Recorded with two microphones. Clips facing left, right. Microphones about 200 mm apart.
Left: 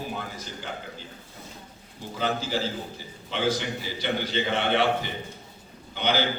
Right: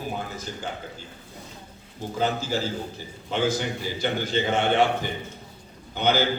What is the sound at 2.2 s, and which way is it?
A man's voice, 45° right (ahead or behind).